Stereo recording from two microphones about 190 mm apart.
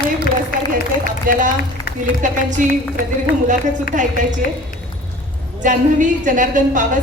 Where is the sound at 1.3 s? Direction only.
45° right (ahead or behind).